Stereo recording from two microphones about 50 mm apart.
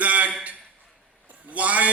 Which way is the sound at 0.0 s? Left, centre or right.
Right.